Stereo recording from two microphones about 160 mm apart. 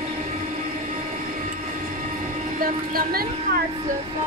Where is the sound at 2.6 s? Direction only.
65° right (ahead or behind).